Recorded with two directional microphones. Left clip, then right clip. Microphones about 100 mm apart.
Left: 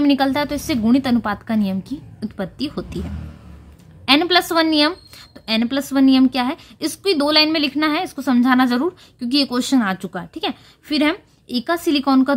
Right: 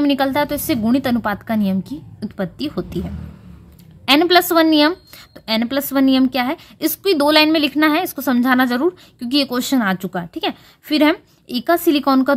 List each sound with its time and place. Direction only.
0.0 s a woman's voice: 25° right (ahead or behind)